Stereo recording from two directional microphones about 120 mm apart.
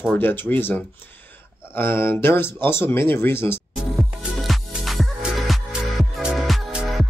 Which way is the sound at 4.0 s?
Centre (ahead or behind).